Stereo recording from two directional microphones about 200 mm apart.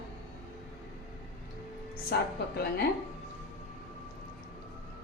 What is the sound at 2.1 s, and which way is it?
Speech, 50° left (ahead or behind).